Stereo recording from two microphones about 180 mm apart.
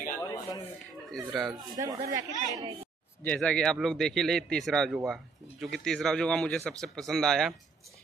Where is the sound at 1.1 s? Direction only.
Centre (ahead or behind).